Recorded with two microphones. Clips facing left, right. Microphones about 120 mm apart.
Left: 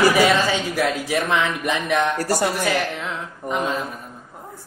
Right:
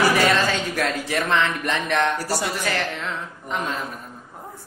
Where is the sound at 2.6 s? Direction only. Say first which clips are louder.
Left 3 dB; 10° left (ahead or behind).